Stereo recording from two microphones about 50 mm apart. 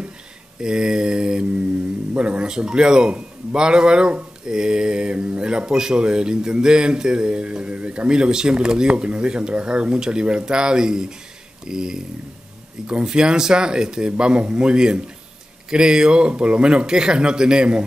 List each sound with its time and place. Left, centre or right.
0.6 s mantra: centre
2.1 s a man's voice: right